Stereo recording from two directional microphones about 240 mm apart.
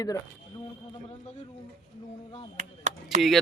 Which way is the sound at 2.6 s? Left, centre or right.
Right.